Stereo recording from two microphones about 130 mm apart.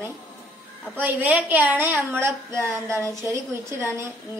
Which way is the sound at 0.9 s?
15° right (ahead or behind).